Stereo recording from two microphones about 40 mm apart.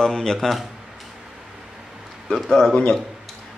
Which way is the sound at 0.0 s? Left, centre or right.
Centre.